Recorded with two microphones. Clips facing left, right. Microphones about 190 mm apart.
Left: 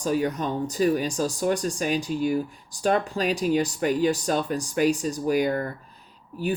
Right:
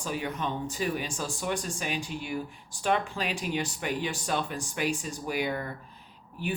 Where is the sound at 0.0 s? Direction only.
40° left (ahead or behind).